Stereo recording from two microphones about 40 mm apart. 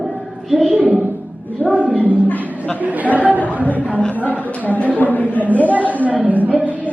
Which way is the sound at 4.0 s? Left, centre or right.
Left.